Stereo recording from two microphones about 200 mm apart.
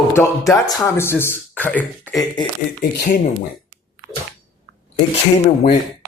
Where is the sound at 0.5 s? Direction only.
15° left (ahead or behind).